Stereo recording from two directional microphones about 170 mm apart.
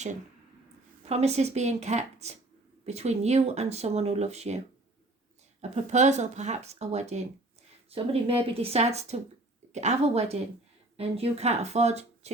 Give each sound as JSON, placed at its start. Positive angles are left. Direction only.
{"t": 1.0, "sound": "speech", "side_deg": -40}